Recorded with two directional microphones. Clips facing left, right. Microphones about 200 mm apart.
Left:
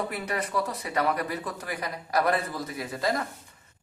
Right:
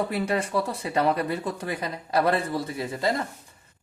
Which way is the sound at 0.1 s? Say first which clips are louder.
Right 5 dB; 30° right (ahead or behind).